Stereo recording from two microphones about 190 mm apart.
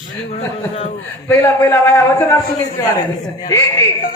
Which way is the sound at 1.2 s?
15° left (ahead or behind).